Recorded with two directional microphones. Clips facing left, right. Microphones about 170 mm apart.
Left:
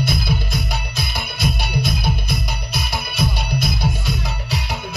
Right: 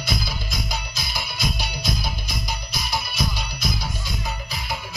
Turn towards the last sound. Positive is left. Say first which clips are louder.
# left 5 dB
turn(degrees=65)  # may be behind; listen again after turning